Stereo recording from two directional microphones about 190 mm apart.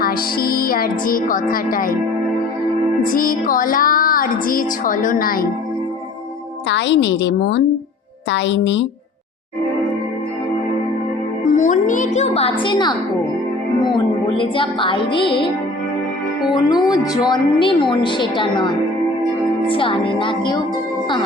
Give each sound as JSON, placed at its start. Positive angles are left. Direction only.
{"t": 0.0, "sound": "music", "side_deg": 50}
{"t": 3.0, "sound": "music", "side_deg": 45}
{"t": 6.7, "sound": "a woman's voice", "side_deg": 65}
{"t": 11.5, "sound": "a woman's voice", "side_deg": 40}
{"t": 13.8, "sound": "music", "side_deg": 25}
{"t": 16.5, "sound": "music", "side_deg": 20}